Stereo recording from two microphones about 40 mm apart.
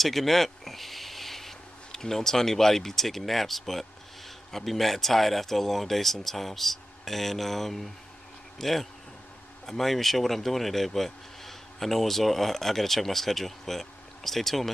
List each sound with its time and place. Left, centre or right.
0.0 s speech: centre